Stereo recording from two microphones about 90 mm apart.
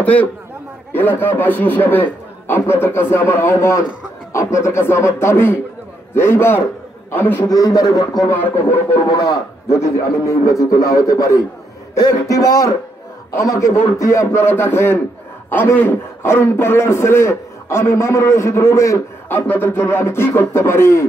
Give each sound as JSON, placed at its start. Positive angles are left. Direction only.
{"t": 0.0, "sound": "a man's voice", "side_deg": 15}
{"t": 7.4, "sound": "a man's voice", "side_deg": 45}
{"t": 8.3, "sound": "a man's voice", "side_deg": 20}
{"t": 8.9, "sound": "a man's voice", "side_deg": 50}
{"t": 9.7, "sound": "a man's voice", "side_deg": 35}
{"t": 19.2, "sound": "a man's voice", "side_deg": 20}